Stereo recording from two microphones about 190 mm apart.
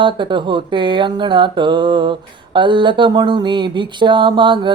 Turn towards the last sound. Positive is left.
turn(degrees=-25)  # may be behind; listen again after turning